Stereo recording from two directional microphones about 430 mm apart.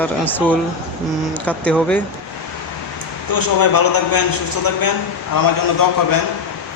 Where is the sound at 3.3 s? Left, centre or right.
Left.